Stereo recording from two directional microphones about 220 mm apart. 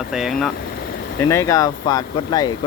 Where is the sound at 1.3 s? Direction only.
15° left (ahead or behind).